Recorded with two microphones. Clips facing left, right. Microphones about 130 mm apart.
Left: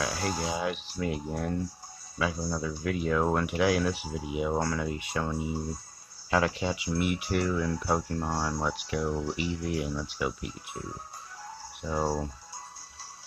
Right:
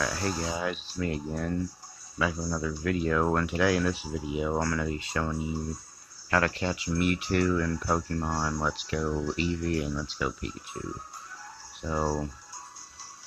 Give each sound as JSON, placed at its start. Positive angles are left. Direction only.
{"t": 0.0, "sound": "speech", "side_deg": 5}
{"t": 8.2, "sound": "speech", "side_deg": 5}
{"t": 9.1, "sound": "speech", "side_deg": 20}
{"t": 11.9, "sound": "speech", "side_deg": 5}